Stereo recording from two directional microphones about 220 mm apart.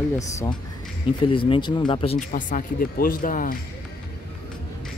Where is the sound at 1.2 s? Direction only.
25° left (ahead or behind).